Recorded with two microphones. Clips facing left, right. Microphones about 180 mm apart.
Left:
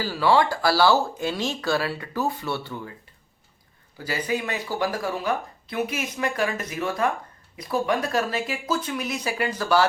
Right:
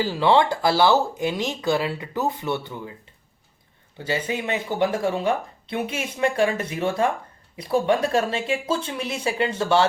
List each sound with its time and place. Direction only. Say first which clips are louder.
0.0 s speech: right 2 dB; 20° right (ahead or behind)
3.9 s speech: right 1 dB; 25° right (ahead or behind)